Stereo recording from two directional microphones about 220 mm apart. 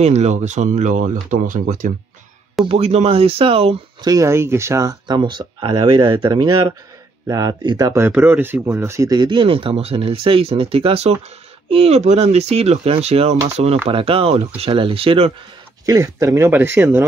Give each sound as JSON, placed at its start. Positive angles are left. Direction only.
{"t": 0.0, "sound": "speech", "side_deg": -30}
{"t": 2.6, "sound": "speech", "side_deg": -25}
{"t": 15.8, "sound": "speech", "side_deg": -15}